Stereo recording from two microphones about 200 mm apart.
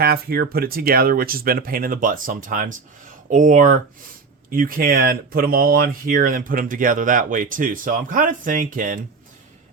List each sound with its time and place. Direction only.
0.0 s speech: 50° right (ahead or behind)